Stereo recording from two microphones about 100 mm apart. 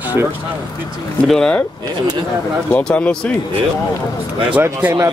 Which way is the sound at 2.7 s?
10° left (ahead or behind).